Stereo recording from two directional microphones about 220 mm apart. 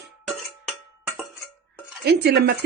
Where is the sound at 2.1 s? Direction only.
50° right (ahead or behind).